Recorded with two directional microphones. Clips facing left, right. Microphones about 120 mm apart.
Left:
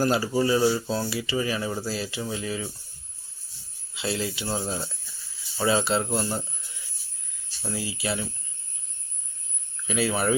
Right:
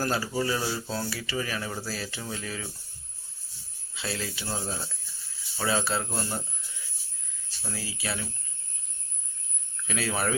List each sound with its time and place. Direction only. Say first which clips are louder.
0.0 s speech: left 5 dB; 20° left (ahead or behind)
3.9 s speech: left 5 dB; 15° left (ahead or behind)
5.5 s speech: left 5 dB; 15° left (ahead or behind)
7.6 s speech: left 5 dB; 10° left (ahead or behind)
9.8 s speech: left 5 dB; 5° left (ahead or behind)